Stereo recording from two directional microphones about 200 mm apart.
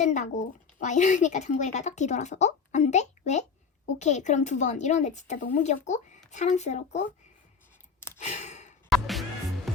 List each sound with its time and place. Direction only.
0.0 s speech: 35° left (ahead or behind)
8.2 s sigh: 35° left (ahead or behind)
8.9 s music: centre (ahead or behind)